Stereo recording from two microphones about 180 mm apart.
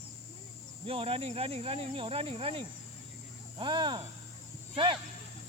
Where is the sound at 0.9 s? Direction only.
30° right (ahead or behind).